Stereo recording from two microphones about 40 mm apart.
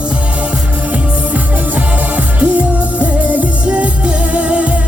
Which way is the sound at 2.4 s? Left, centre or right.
Right.